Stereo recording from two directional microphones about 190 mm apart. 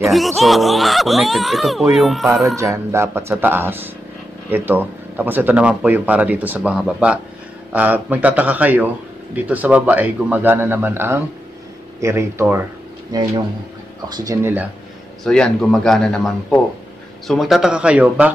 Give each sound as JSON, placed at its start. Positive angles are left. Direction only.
{"t": 0.0, "sound": "speech", "side_deg": 0}
{"t": 2.5, "sound": "speech", "side_deg": -15}
{"t": 15.2, "sound": "speech", "side_deg": 5}